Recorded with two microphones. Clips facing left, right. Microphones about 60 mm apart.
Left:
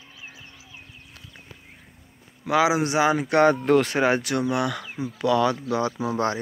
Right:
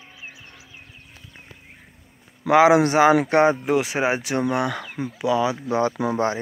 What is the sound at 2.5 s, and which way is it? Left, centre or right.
Speech, right.